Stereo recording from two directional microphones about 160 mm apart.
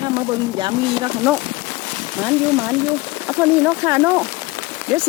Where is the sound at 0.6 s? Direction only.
30° right (ahead or behind).